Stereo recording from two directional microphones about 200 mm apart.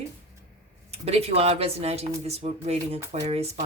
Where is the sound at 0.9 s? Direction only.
30° right (ahead or behind).